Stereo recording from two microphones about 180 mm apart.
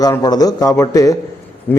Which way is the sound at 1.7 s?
10° left (ahead or behind).